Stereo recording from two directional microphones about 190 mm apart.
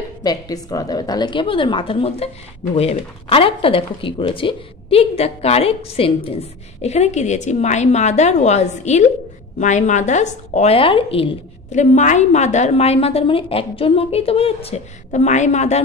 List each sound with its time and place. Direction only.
0.2 s a woman's voice: 20° left (ahead or behind); by 15.8 s 40° left (ahead or behind)